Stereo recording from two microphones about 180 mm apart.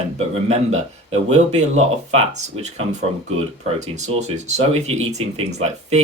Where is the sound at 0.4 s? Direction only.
35° right (ahead or behind).